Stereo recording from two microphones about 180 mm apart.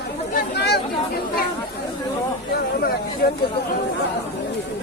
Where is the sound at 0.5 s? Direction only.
65° left (ahead or behind).